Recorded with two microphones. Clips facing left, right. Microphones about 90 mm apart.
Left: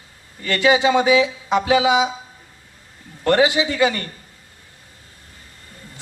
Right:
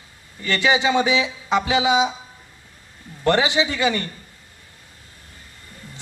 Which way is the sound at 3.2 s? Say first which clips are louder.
Left 2 dB; 25° right (ahead or behind).